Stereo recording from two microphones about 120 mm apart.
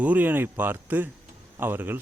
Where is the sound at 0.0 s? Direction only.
15° right (ahead or behind).